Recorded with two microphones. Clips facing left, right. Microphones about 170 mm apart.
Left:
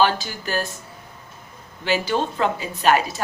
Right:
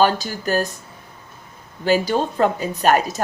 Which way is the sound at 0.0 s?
45° right (ahead or behind).